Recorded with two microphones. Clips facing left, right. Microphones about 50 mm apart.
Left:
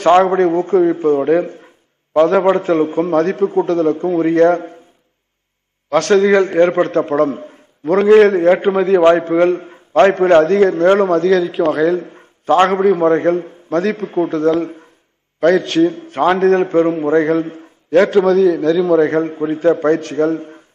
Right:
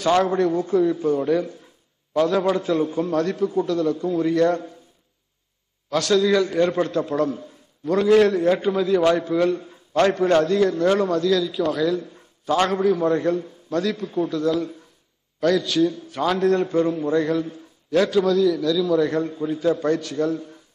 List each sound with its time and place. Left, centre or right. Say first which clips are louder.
0.0 s a man's voice: left 8 dB; left
5.9 s a man's voice: left 7 dB; left